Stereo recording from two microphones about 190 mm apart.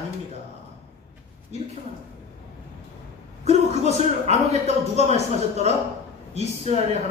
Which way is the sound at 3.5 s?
35° right (ahead or behind).